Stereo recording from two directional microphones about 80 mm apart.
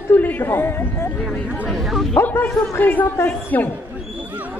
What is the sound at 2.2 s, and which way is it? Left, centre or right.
Speech, left.